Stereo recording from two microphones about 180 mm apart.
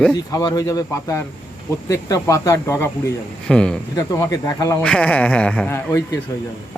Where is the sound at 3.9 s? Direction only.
20° left (ahead or behind).